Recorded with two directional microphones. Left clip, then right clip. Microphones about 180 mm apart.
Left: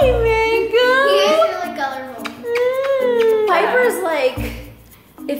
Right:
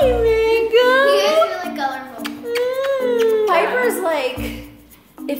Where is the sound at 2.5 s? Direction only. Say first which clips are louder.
Left 2 dB; centre (ahead or behind).